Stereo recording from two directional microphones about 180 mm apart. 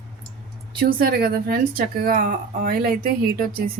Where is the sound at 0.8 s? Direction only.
55° right (ahead or behind).